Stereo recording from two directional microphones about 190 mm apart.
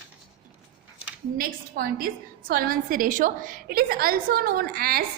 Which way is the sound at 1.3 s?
50° right (ahead or behind).